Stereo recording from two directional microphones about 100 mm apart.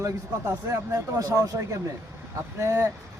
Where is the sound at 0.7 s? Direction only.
35° right (ahead or behind).